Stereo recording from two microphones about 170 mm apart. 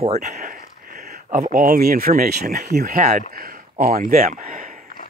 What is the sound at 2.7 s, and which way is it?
Speech, 55° right (ahead or behind).